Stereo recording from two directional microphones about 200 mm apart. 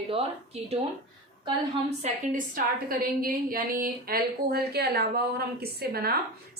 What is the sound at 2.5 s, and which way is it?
A woman's voice, 45° right (ahead or behind).